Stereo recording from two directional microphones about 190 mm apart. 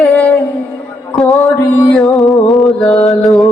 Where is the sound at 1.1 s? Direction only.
Centre (ahead or behind).